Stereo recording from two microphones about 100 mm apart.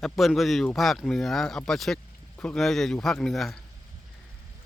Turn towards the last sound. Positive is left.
turn(degrees=0)  # may be behind; listen again after turning